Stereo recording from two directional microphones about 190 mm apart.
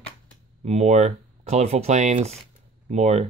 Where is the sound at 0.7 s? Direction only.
35° right (ahead or behind).